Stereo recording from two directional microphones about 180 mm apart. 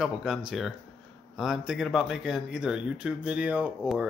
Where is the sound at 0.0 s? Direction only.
Centre (ahead or behind).